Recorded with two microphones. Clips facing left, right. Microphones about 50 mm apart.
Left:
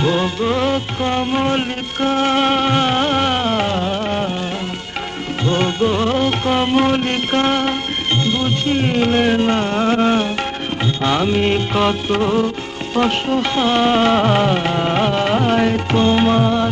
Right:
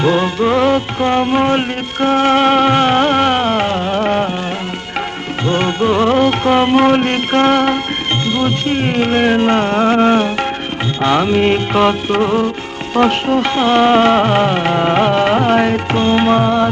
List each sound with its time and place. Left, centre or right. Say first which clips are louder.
0.0 s music: right 4 dB; right
2.8 s music: right 4 dB; right
3.9 s music: right 5 dB; right
5.4 s music: right 2 dB; right
5.8 s music: right 4 dB; right
7.4 s music: right 7 dB; right
8.6 s music: right 1 dB; right
12.9 s music: right 4 dB; right
14.1 s music: right 2 dB; right
14.6 s music: right 4 dB; right